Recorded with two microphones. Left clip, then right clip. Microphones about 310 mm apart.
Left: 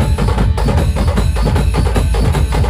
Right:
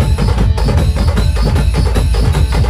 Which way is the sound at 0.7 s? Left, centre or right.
Left.